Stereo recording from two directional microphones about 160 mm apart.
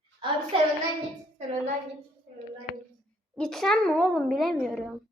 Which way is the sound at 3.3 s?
5° left (ahead or behind).